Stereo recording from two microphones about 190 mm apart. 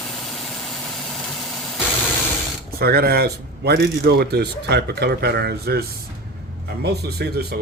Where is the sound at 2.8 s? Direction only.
55° right (ahead or behind).